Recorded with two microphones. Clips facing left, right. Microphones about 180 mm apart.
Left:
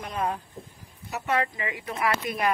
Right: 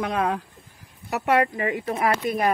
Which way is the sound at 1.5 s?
50° right (ahead or behind).